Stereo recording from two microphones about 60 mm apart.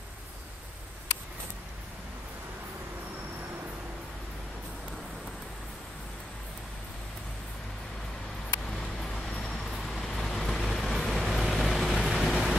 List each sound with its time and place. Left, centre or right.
9.1 s vehicle: centre
9.8 s vehicle: centre